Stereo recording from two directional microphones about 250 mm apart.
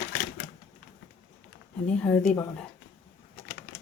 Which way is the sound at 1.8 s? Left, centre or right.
Centre.